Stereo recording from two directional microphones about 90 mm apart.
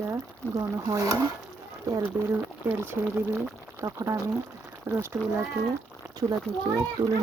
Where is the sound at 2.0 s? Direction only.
20° right (ahead or behind).